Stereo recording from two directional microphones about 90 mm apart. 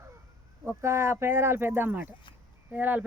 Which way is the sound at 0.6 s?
30° right (ahead or behind).